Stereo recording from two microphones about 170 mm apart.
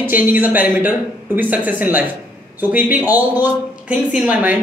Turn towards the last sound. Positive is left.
turn(degrees=-10)  # may be behind; listen again after turning